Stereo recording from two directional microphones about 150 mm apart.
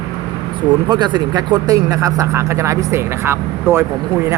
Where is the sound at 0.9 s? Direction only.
30° right (ahead or behind).